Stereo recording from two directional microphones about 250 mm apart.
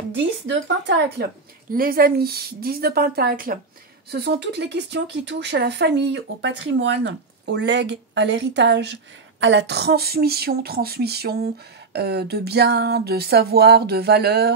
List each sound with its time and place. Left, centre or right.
0.8 s speech: right